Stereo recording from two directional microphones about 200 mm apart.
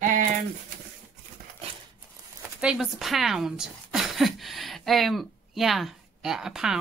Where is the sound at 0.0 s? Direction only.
40° right (ahead or behind).